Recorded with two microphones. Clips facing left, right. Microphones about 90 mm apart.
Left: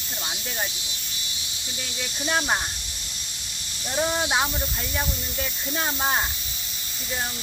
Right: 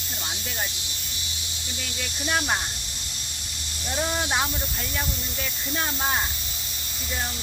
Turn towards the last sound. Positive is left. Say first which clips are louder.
# left 2 dB
turn(degrees=20)  # may be behind; listen again after turning